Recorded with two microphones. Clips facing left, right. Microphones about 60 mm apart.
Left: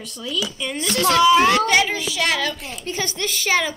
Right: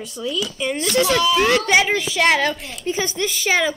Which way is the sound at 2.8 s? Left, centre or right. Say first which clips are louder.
Right 4 dB; centre.